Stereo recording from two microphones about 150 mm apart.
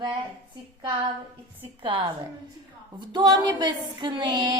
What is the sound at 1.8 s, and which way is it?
Female singing, 30° right (ahead or behind).